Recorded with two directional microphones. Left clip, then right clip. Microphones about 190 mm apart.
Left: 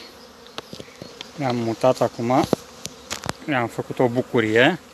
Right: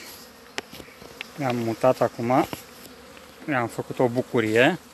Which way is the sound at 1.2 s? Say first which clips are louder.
Left 2 dB; centre (ahead or behind).